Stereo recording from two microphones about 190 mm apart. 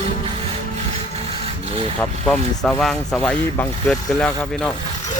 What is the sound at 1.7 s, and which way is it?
Speech, 30° right (ahead or behind).